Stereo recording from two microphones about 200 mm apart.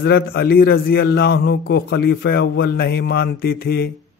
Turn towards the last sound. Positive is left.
turn(degrees=50)  # may be behind; listen again after turning